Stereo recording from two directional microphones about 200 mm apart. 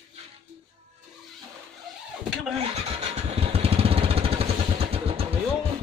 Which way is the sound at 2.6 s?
30° right (ahead or behind).